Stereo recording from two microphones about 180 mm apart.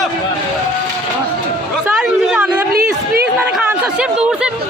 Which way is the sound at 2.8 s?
55° right (ahead or behind).